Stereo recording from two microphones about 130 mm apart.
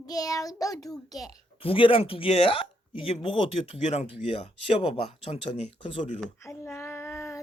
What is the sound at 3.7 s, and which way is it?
Speech, 60° left (ahead or behind).